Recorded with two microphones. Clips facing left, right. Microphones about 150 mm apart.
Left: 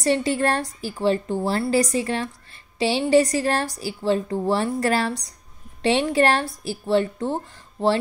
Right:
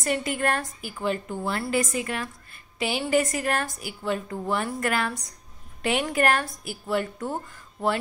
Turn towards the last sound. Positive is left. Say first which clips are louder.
# left 5 dB
turn(degrees=30)  # may be behind; listen again after turning